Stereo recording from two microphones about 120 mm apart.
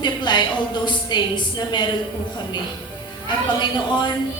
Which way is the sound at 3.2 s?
40° left (ahead or behind).